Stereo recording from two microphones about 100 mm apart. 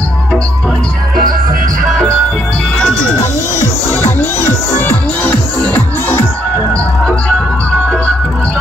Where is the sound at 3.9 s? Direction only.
20° left (ahead or behind).